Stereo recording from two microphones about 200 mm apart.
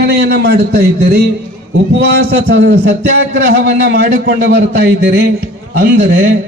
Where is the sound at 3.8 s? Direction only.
50° right (ahead or behind).